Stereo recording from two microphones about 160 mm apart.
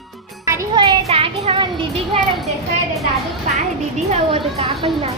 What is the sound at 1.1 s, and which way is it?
Speech, 35° right (ahead or behind).